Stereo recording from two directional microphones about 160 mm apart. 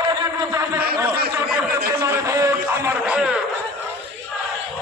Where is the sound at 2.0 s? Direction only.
20° right (ahead or behind).